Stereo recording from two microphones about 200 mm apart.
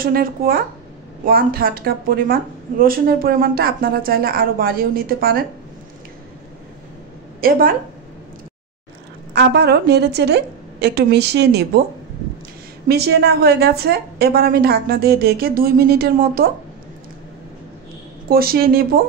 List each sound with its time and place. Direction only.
0.0 s a woman's voice: 45° right (ahead or behind)
7.3 s a woman's voice: 45° right (ahead or behind)
9.3 s a woman's voice: 55° right (ahead or behind)
12.8 s a woman's voice: 55° right (ahead or behind)
18.3 s a woman's voice: 50° right (ahead or behind)